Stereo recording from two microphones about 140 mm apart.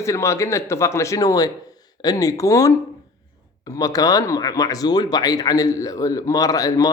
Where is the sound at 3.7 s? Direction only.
25° left (ahead or behind).